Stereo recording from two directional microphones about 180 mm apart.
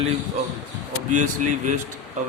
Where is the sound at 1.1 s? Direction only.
45° right (ahead or behind).